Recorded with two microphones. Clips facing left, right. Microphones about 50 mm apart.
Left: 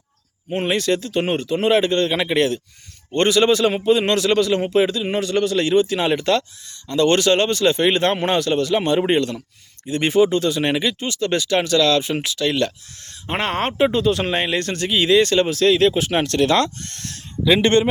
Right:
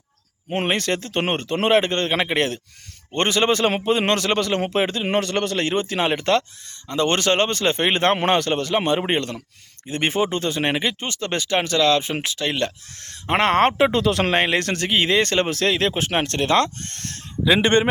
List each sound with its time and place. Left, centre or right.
0.4 s speech: right
13.0 s speech: right
17.4 s speech: centre